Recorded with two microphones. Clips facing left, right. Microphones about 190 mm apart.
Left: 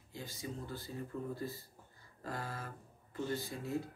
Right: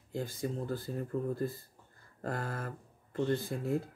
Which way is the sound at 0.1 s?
50° right (ahead or behind).